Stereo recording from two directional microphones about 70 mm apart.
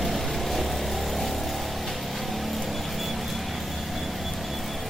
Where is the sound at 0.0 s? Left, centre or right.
Centre.